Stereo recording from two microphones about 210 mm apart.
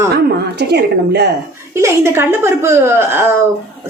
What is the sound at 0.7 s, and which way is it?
Speech, 50° right (ahead or behind).